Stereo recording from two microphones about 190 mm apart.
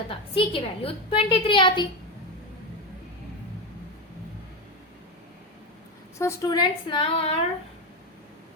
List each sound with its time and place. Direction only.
0.1 s a woman's voice: 30° left (ahead or behind)
6.1 s a woman's voice: 15° left (ahead or behind)